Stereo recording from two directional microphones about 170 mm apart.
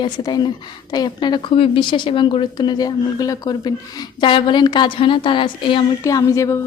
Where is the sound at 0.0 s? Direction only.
25° left (ahead or behind).